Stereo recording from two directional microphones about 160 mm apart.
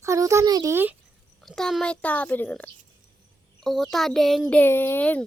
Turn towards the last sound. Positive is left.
turn(degrees=10)  # may be behind; listen again after turning